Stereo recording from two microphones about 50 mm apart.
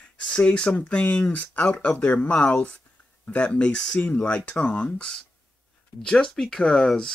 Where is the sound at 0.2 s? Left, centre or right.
Left.